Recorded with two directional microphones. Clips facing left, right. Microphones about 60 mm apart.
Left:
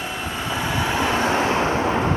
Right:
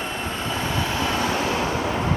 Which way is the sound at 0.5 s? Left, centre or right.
Centre.